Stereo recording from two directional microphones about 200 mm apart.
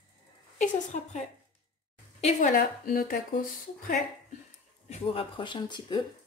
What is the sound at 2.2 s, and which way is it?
Speech, 40° left (ahead or behind).